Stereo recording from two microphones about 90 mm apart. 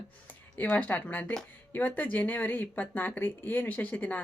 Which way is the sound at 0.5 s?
20° left (ahead or behind).